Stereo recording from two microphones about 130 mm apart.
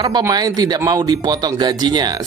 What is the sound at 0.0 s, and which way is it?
Speech, 30° right (ahead or behind).